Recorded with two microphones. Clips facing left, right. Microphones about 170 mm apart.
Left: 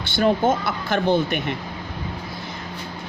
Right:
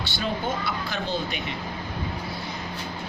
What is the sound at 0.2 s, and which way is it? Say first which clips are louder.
Speech: left 10 dB; 55° left (ahead or behind).